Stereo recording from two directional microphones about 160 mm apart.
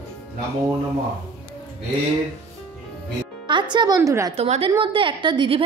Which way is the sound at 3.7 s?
25° right (ahead or behind).